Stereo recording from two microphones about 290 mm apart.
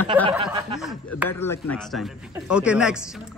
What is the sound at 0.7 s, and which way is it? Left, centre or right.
A man's voice, centre.